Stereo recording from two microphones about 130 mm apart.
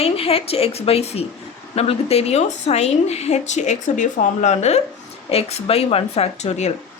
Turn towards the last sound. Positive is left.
turn(degrees=60)  # may be behind; listen again after turning